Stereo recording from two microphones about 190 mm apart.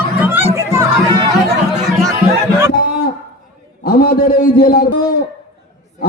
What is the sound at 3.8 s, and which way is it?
A man's voice, 50° left (ahead or behind).